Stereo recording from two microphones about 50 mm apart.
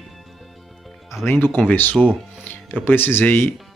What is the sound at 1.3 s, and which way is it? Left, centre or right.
Speech, left.